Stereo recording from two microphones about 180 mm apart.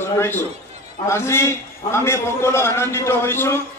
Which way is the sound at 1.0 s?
15° left (ahead or behind).